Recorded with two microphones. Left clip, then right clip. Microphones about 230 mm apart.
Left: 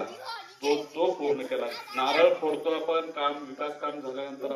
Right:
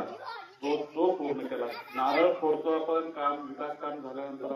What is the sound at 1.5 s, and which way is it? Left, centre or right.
Speech, left.